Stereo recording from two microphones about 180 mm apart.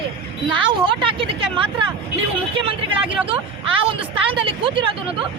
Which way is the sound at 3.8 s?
30° right (ahead or behind).